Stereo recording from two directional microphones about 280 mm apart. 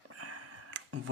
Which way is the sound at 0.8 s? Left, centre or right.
Right.